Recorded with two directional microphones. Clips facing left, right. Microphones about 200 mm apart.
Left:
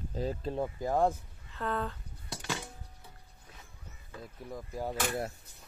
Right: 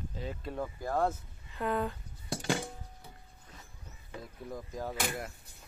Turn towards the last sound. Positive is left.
turn(degrees=10)  # may be behind; listen again after turning